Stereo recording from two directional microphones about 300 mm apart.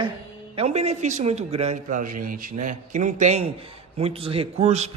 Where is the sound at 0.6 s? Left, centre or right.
Right.